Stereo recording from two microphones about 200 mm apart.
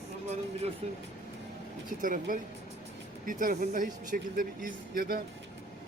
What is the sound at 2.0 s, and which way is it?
Speech, 40° right (ahead or behind).